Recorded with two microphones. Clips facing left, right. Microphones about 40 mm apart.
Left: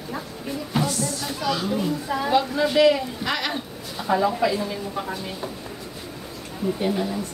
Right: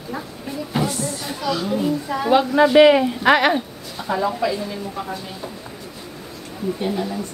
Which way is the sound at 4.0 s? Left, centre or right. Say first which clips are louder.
Even; centre.